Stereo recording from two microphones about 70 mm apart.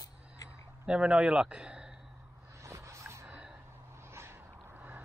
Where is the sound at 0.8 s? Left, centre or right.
Centre.